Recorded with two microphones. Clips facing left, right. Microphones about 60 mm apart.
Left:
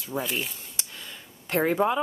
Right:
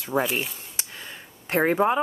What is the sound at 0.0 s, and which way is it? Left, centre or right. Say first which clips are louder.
Speech: right 7 dB; right.